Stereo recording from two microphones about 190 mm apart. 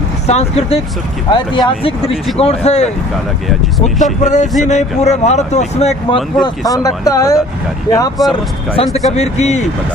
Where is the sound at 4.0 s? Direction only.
40° left (ahead or behind).